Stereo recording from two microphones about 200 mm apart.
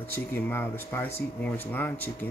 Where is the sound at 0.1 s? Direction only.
10° left (ahead or behind).